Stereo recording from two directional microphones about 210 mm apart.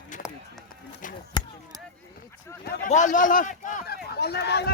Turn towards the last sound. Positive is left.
turn(degrees=50)  # may be behind; listen again after turning